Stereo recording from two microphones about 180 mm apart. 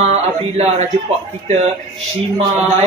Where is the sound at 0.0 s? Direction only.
35° right (ahead or behind).